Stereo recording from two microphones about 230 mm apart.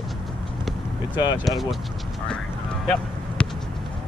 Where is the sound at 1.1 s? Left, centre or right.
Centre.